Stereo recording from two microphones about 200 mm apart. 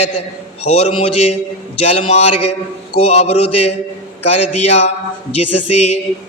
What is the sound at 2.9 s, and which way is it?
Speech, 30° left (ahead or behind).